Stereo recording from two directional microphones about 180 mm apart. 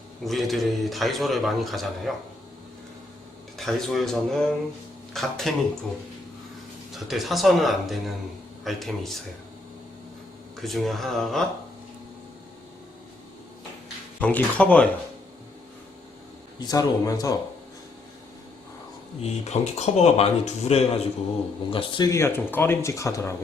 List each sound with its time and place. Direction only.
0.3 s a man's voice: centre (ahead or behind)
3.6 s a man's voice: centre (ahead or behind)
6.9 s a man's voice: centre (ahead or behind)
10.6 s a man's voice: centre (ahead or behind)
14.2 s speech: 5° left (ahead or behind)
16.6 s speech: 20° left (ahead or behind)
19.2 s speech: 40° left (ahead or behind); by 23.3 s 15° left (ahead or behind)